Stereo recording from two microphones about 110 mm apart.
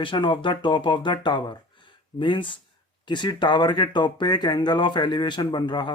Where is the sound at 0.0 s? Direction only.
45° left (ahead or behind).